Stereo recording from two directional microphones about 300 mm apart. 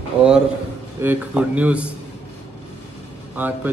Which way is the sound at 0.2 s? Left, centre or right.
Centre.